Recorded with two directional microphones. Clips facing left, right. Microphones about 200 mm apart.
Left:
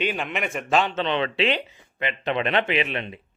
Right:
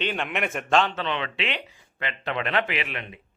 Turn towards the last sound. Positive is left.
turn(degrees=25)  # may be behind; listen again after turning